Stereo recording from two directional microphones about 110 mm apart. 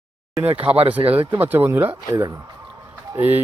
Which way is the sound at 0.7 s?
35° right (ahead or behind).